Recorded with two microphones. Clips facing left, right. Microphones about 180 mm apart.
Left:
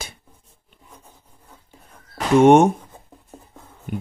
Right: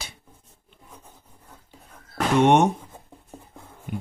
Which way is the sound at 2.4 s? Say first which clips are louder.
Left 6 dB; 45° left (ahead or behind).